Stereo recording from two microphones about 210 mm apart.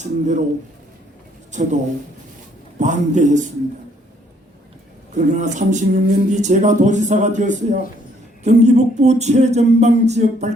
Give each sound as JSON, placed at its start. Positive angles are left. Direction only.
{"t": 0.0, "sound": "speech", "side_deg": -35}
{"t": 1.5, "sound": "speech", "side_deg": -35}
{"t": 2.7, "sound": "speech", "side_deg": -35}
{"t": 5.1, "sound": "speech", "side_deg": -35}